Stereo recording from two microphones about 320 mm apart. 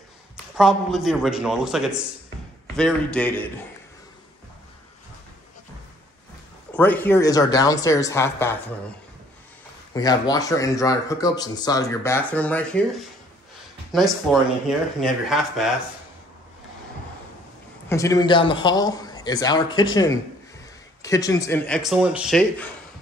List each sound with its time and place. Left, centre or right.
0.6 s a man's voice: centre
6.7 s speech: centre
9.9 s speech: centre
13.9 s a man's voice: centre
17.8 s a man's voice: centre